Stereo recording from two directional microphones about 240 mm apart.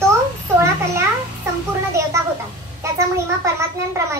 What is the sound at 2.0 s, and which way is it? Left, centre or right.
Speech, centre.